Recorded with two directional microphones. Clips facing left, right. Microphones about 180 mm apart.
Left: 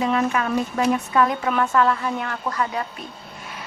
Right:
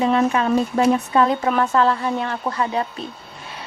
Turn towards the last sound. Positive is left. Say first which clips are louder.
# right 3 dB
turn(degrees=-25)  # may be behind; listen again after turning